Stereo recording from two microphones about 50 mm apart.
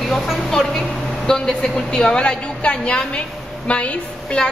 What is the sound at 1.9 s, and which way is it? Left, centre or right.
A woman's voice, centre.